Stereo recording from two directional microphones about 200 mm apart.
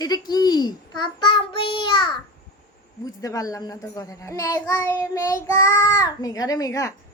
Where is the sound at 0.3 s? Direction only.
20° left (ahead or behind).